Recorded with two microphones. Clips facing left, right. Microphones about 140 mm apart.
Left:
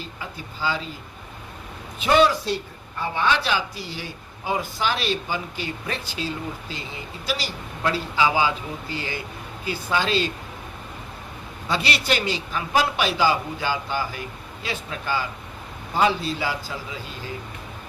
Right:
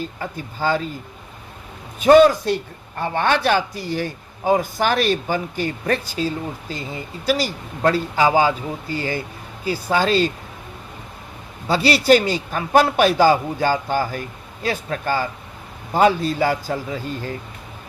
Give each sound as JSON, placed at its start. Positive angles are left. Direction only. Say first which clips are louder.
{"t": 0.0, "sound": "a man's voice", "louder": "right 7 dB", "side_deg": -50}
{"t": 2.0, "sound": "a man's voice", "louder": "right 7 dB", "side_deg": -45}
{"t": 11.7, "sound": "a man's voice", "louder": "right 9 dB", "side_deg": -35}